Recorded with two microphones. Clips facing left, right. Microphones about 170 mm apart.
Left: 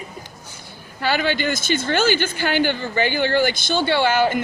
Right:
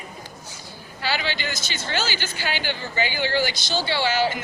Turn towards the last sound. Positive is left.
turn(degrees=55)  # may be behind; listen again after turning